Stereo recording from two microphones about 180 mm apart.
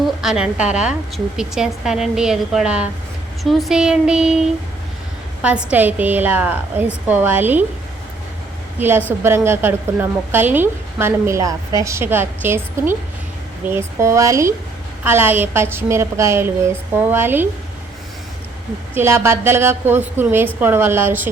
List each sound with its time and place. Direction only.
0.2 s a woman's voice: 5° right (ahead or behind)
5.4 s a woman's voice: 5° right (ahead or behind)
8.8 s a woman's voice: 10° right (ahead or behind)
18.9 s a woman's voice: 15° right (ahead or behind)